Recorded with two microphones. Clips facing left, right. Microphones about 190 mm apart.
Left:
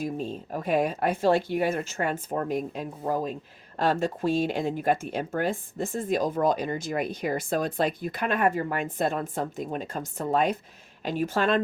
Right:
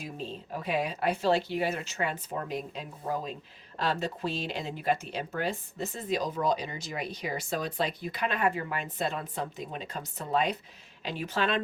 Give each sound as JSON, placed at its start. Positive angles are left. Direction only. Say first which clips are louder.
{"t": 0.0, "sound": "speech", "louder": "left 8 dB", "side_deg": 50}